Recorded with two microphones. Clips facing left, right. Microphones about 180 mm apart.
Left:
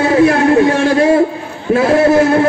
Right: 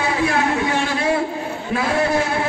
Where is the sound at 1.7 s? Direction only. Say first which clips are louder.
Left 10 dB; 45° left (ahead or behind).